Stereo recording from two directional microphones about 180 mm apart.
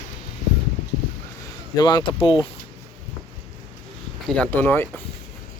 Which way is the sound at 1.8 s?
25° left (ahead or behind).